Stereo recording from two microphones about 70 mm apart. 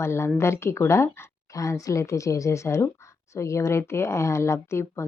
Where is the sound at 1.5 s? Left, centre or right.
Left.